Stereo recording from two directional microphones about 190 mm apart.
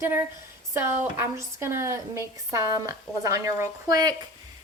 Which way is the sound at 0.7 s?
15° right (ahead or behind).